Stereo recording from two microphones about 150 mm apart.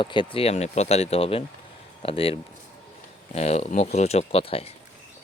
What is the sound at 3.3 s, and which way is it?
Speech, 45° left (ahead or behind).